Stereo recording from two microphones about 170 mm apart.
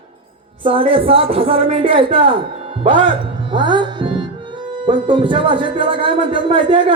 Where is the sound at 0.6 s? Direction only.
30° right (ahead or behind).